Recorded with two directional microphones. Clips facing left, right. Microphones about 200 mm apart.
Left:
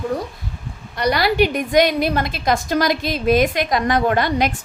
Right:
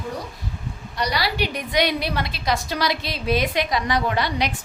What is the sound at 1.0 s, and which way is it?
A woman's voice, 55° left (ahead or behind).